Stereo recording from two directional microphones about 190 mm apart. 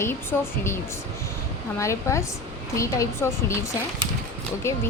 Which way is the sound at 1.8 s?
15° left (ahead or behind).